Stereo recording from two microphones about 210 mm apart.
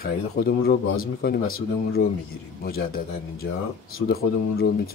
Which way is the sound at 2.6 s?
45° left (ahead or behind).